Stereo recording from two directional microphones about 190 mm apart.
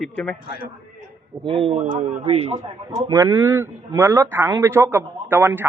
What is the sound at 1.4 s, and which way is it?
A man's voice, 25° right (ahead or behind).